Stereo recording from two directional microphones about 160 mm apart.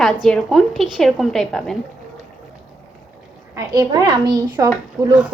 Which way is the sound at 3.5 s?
25° right (ahead or behind).